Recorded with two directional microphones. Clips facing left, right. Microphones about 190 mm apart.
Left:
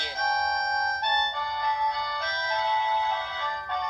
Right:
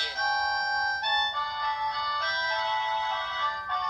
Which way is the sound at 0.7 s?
50° left (ahead or behind).